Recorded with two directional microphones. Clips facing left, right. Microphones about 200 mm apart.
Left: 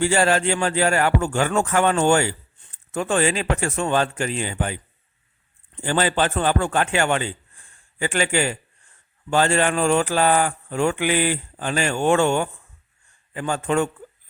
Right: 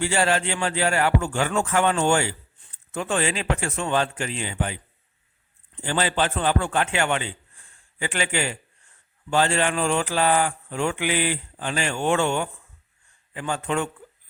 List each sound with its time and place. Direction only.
0.0 s a man's voice: 45° left (ahead or behind)
5.8 s a man's voice: 45° left (ahead or behind)